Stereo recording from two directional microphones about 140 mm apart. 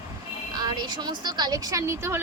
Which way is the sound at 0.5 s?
30° right (ahead or behind).